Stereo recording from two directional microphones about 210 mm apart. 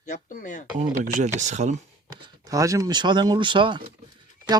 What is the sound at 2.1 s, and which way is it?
Speech, 20° right (ahead or behind).